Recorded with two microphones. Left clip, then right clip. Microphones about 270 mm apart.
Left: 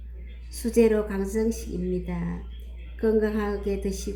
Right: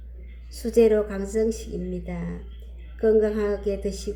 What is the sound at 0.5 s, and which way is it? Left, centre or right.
Speech, centre.